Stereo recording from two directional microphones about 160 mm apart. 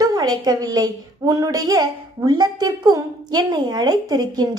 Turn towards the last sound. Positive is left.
turn(degrees=-25)  # may be behind; listen again after turning